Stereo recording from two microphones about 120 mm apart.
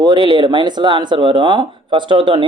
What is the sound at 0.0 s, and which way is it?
Speech, 40° right (ahead or behind).